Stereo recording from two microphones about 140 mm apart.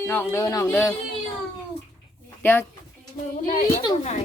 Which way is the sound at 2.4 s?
15° left (ahead or behind).